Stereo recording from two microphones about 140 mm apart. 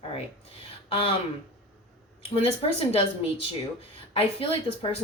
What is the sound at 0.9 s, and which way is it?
Speech, 40° left (ahead or behind).